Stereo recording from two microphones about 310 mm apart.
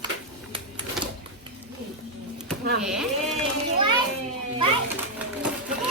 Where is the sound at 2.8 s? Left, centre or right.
Centre.